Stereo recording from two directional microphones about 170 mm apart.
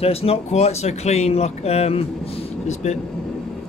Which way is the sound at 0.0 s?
35° left (ahead or behind).